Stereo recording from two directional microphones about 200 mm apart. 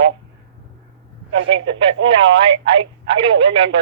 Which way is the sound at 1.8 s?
25° right (ahead or behind).